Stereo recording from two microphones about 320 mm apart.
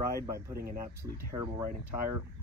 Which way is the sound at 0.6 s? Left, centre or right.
Right.